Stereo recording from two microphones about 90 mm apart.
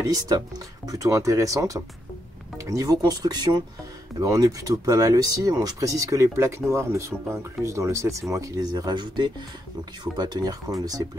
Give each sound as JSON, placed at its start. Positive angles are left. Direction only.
{"t": 0.0, "sound": "speech", "side_deg": -40}
{"t": 4.2, "sound": "speech", "side_deg": -40}